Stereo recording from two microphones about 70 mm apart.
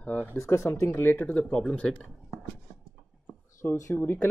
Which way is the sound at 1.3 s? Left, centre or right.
Centre.